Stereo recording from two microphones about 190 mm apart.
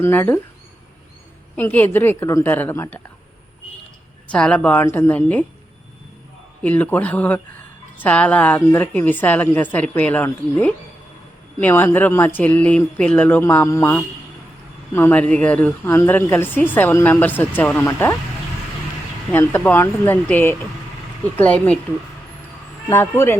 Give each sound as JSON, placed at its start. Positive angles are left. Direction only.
{"t": 0.0, "sound": "a woman's voice", "side_deg": 10}
{"t": 1.5, "sound": "a woman's voice", "side_deg": 10}
{"t": 4.3, "sound": "a woman's voice", "side_deg": 5}
{"t": 6.6, "sound": "a woman's voice", "side_deg": 10}
{"t": 19.3, "sound": "a woman's voice", "side_deg": 10}
{"t": 22.9, "sound": "a woman's voice", "side_deg": 15}